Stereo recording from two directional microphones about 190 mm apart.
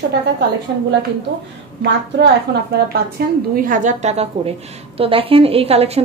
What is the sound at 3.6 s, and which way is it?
A woman's voice, 45° right (ahead or behind).